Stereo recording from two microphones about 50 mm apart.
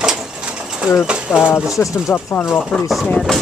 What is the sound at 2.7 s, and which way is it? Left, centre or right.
Speech, centre.